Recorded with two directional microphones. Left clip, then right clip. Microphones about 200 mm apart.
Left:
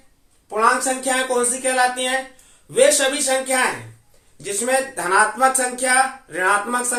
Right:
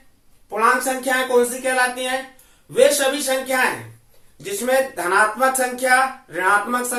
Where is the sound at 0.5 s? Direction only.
25° left (ahead or behind).